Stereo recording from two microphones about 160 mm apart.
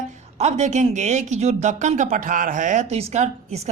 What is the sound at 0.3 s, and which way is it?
Speech, 45° right (ahead or behind).